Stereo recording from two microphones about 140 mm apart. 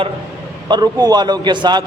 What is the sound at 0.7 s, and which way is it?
A man's voice, 30° right (ahead or behind).